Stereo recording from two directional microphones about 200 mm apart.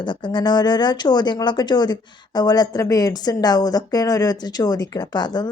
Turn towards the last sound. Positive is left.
turn(degrees=20)  # may be behind; listen again after turning